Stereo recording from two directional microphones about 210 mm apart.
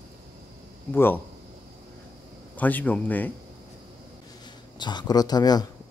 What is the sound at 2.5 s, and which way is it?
Speech, 5° left (ahead or behind).